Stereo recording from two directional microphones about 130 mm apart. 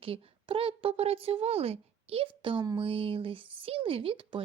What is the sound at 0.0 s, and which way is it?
Speech, 45° right (ahead or behind).